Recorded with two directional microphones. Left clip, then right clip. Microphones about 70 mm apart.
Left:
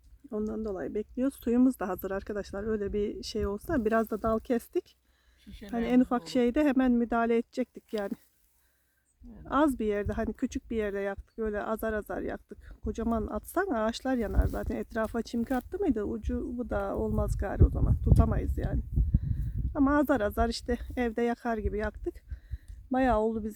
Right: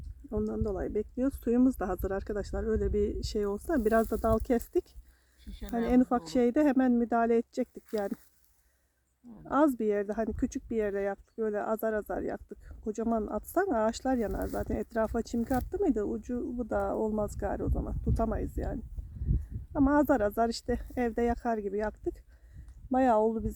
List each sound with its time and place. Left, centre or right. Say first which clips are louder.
0.6 s speech: right 1 dB; right
0.9 s speech: even; centre
4.3 s speech: right 1 dB; centre
5.8 s speech: even; centre
9.5 s speech: even; centre
16.6 s speech: right 2 dB; centre